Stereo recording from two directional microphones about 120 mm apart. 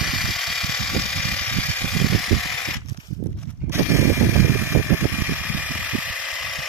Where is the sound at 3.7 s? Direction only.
20° right (ahead or behind).